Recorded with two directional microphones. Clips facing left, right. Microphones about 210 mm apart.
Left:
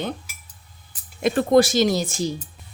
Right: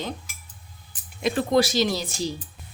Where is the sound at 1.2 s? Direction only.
50° left (ahead or behind).